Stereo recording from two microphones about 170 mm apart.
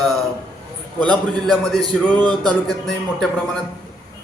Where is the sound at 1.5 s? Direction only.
Centre (ahead or behind).